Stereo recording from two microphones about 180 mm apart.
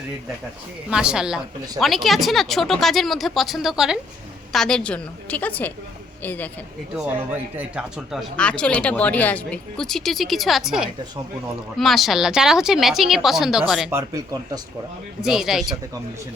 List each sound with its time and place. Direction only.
0.9 s a woman's voice: 5° right (ahead or behind)
6.9 s speech: 10° right (ahead or behind)
13.9 s speech: 20° right (ahead or behind)
15.2 s speech: centre (ahead or behind)